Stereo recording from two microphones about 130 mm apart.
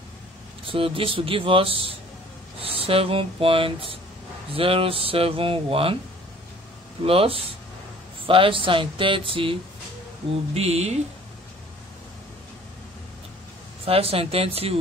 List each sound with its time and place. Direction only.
0.7 s rub: 45° right (ahead or behind)
7.1 s rub: 45° right (ahead or behind)
10.5 s rub: 55° right (ahead or behind)
13.8 s rub: 50° right (ahead or behind)